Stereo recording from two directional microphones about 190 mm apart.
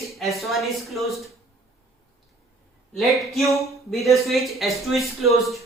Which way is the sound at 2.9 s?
Centre (ahead or behind).